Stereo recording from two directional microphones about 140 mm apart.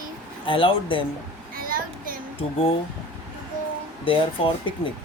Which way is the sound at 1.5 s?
90° right.